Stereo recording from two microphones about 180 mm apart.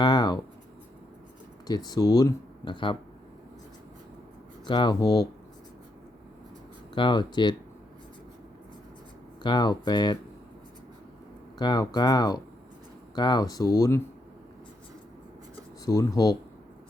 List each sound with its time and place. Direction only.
0.0 s writing: 25° left (ahead or behind)
1.6 s speech: 20° left (ahead or behind)
4.6 s speech: 25° left (ahead or behind)
6.9 s speech: 25° left (ahead or behind)
9.4 s speech: 25° left (ahead or behind)
11.6 s speech: 20° left (ahead or behind)
15.9 s speech: 20° left (ahead or behind)